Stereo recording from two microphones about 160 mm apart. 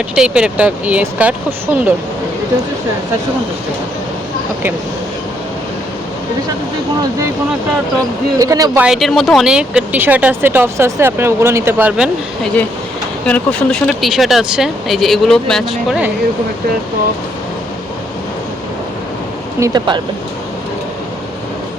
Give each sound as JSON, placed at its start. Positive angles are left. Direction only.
{"t": 0.2, "sound": "speech", "side_deg": -5}
{"t": 8.4, "sound": "speech", "side_deg": -20}
{"t": 8.8, "sound": "speech", "side_deg": 0}
{"t": 13.2, "sound": "speech", "side_deg": 10}
{"t": 19.5, "sound": "speech", "side_deg": -20}